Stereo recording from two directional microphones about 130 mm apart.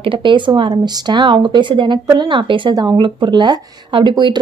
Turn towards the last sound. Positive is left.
turn(degrees=-35)  # may be behind; listen again after turning